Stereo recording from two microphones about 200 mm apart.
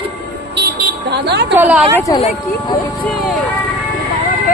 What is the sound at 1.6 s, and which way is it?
Speech, 10° right (ahead or behind).